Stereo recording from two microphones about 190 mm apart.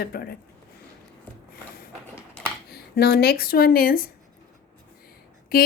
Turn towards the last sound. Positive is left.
turn(degrees=50)  # may be behind; listen again after turning